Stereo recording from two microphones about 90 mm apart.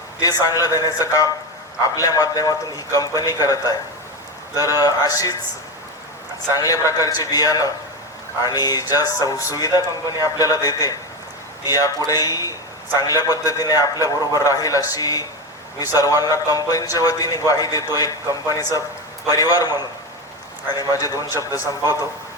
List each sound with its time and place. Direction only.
0.2 s speech: 45° left (ahead or behind)
4.8 s speech: 40° left (ahead or behind)
6.6 s a man's voice: 40° left (ahead or behind)
20.9 s a man's voice: 40° left (ahead or behind)